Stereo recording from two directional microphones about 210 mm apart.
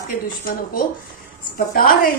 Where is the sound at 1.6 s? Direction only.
45° left (ahead or behind).